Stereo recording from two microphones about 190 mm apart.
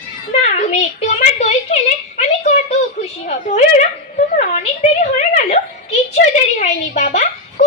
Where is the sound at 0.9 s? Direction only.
35° left (ahead or behind).